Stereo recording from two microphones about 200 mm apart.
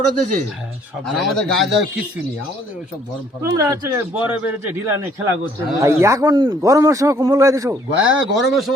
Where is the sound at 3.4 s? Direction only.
15° right (ahead or behind).